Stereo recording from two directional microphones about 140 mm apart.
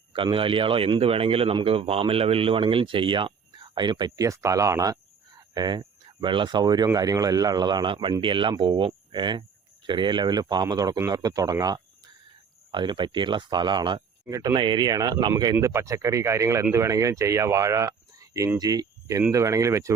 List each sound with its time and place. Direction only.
0.1 s a man's voice: 40° right (ahead or behind)
15.5 s speech: 20° right (ahead or behind)